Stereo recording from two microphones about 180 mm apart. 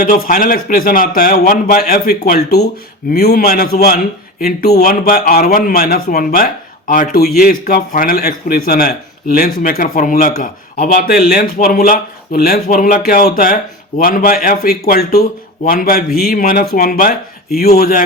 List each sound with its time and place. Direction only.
0.0 s a man's voice: 55° left (ahead or behind)